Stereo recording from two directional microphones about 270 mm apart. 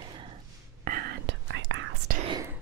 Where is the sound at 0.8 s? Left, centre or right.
Right.